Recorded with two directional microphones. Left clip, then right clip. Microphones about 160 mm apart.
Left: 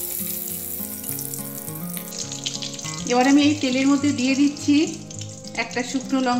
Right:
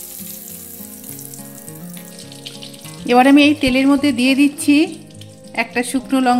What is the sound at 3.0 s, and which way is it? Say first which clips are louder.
Speech: right 7 dB; 90° right.